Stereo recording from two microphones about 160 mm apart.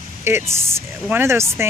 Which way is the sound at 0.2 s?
15° right (ahead or behind).